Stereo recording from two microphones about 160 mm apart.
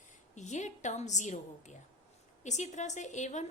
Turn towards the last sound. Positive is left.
turn(degrees=50)  # may be behind; listen again after turning